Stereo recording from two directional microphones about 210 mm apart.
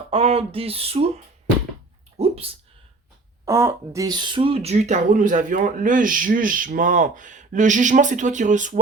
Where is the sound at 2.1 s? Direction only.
30° right (ahead or behind).